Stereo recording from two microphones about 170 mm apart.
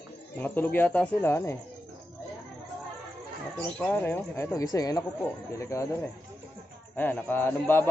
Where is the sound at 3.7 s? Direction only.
10° left (ahead or behind).